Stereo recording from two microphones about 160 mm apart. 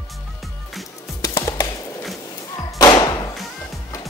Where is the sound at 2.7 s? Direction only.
25° left (ahead or behind).